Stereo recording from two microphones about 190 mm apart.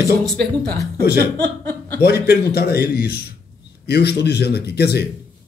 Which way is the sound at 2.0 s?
55° left (ahead or behind).